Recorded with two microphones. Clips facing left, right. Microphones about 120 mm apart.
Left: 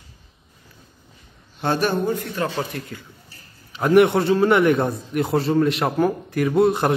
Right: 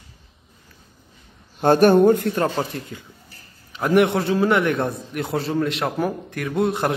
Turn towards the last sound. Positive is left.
turn(degrees=0)  # may be behind; listen again after turning